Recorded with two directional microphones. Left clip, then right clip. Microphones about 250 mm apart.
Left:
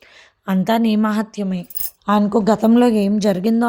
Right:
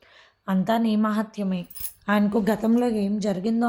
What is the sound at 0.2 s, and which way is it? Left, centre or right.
A woman's voice, left.